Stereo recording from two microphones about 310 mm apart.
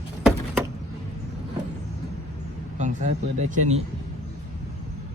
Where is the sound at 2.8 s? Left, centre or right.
Right.